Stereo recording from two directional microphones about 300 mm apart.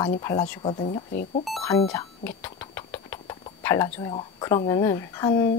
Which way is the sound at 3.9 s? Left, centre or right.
Centre.